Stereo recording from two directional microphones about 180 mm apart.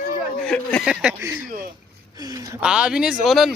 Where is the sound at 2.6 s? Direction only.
5° right (ahead or behind).